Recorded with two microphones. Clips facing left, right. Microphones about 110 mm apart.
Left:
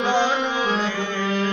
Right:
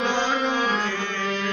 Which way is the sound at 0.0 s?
10° left (ahead or behind).